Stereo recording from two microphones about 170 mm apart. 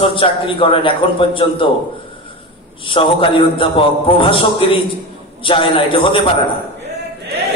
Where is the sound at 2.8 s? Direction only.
30° left (ahead or behind).